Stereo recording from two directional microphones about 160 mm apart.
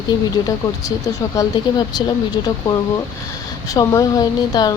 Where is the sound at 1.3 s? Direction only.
20° left (ahead or behind).